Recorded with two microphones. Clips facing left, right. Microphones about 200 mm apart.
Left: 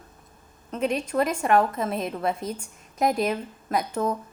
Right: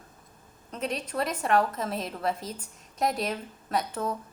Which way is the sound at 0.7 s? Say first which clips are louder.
Left 6 dB; 10° left (ahead or behind).